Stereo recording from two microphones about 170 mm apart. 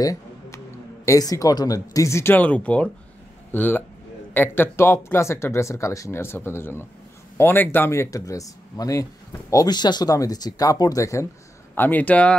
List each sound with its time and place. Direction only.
0.0 s music: 20° left (ahead or behind)
1.0 s speech: 20° left (ahead or behind)